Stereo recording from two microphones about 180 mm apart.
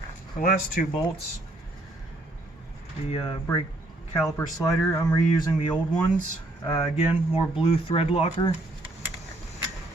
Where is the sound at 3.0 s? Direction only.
30° left (ahead or behind).